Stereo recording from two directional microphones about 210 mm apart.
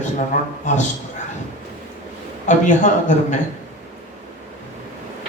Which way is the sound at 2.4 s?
35° left (ahead or behind).